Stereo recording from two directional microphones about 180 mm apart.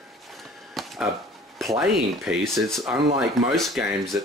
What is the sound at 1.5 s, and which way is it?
Speech, centre (ahead or behind).